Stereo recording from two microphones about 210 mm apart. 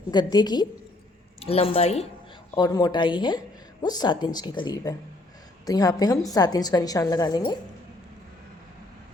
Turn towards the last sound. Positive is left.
turn(degrees=20)  # may be behind; listen again after turning